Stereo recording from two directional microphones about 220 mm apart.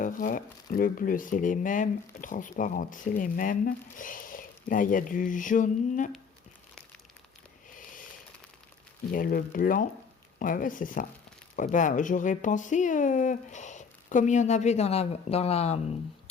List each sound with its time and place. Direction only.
0.0 s speech: 40° left (ahead or behind)
7.7 s a sound: 35° left (ahead or behind)
9.1 s speech: 40° left (ahead or behind)